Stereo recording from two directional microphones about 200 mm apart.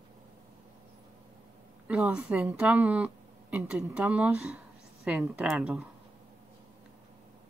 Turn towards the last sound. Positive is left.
turn(degrees=0)  # may be behind; listen again after turning